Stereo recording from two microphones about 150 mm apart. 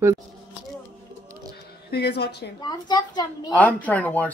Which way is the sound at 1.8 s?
90° left.